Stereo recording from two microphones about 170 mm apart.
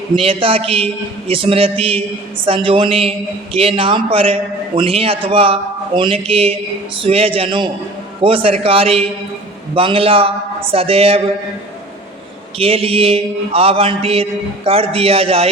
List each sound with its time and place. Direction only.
0.2 s a man's voice: 35° right (ahead or behind)
12.5 s a man's voice: 35° right (ahead or behind)